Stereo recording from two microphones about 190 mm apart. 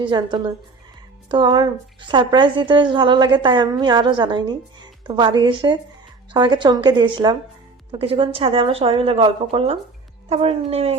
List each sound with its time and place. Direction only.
0.0 s a woman's voice: 25° right (ahead or behind)